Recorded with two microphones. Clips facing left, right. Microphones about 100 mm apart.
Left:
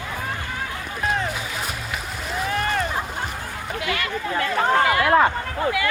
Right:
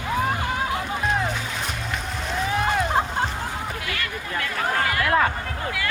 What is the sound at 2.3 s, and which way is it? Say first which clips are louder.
Boat: right 1 dB; centre (ahead or behind).